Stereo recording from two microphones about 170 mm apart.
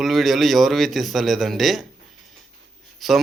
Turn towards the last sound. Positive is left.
turn(degrees=0)  # may be behind; listen again after turning